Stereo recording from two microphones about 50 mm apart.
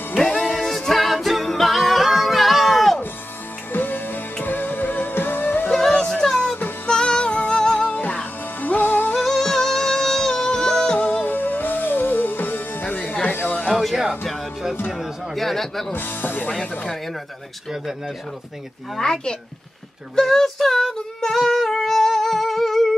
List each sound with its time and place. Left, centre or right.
0.2 s music: centre
3.7 s music: left
5.7 s music: centre
5.9 s a sound: centre
6.2 s music: centre
7.9 s music: left
9.1 s music: centre
11.0 s music: left
14.2 s music: centre
14.9 s a sound: centre
15.9 s music: left
18.9 s a child's voice: centre
20.2 s female singing: centre